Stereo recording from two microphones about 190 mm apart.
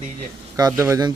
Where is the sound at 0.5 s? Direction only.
15° right (ahead or behind).